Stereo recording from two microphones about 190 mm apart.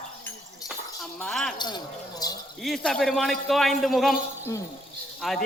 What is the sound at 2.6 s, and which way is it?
Speech, centre (ahead or behind).